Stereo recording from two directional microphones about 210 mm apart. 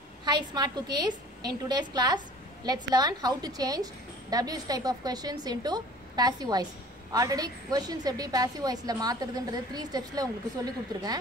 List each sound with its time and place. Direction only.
0.2 s a woman's voice: 20° right (ahead or behind)